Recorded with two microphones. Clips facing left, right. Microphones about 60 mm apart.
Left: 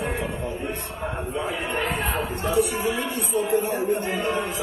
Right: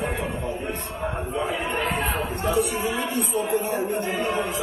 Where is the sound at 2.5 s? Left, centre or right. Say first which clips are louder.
Left 1 dB; right.